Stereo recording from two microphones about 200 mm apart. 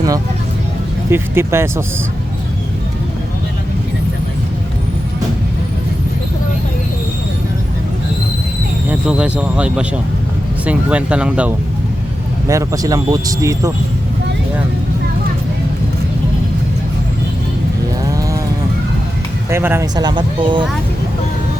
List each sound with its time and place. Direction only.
1.1 s speech: 10° right (ahead or behind)
8.9 s speech: 5° right (ahead or behind)
12.5 s speech: 15° right (ahead or behind)
18.1 s a sound: 15° right (ahead or behind)
19.5 s speech: 10° right (ahead or behind)